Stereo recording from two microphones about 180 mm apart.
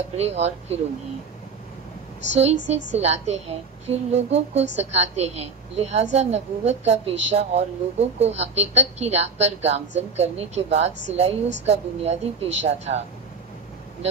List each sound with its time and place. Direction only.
0.1 s a woman's voice: 35° right (ahead or behind)
2.3 s a woman's voice: 35° right (ahead or behind)